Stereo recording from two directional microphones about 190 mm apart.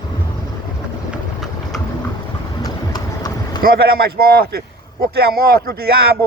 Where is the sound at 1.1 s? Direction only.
Centre (ahead or behind).